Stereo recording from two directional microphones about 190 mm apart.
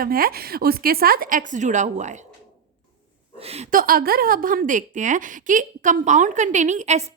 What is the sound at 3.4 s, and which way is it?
Speech, 35° right (ahead or behind).